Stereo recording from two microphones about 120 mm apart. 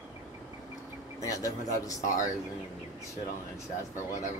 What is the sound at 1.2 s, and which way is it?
Speech, 30° left (ahead or behind).